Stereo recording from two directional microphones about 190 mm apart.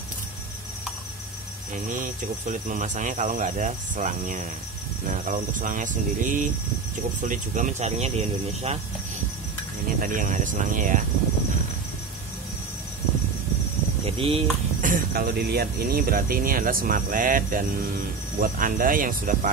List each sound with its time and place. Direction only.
1.9 s speech: 40° right (ahead or behind)
10.0 s speech: 45° right (ahead or behind)
14.0 s speech: 30° right (ahead or behind)
14.8 s speech: 50° right (ahead or behind)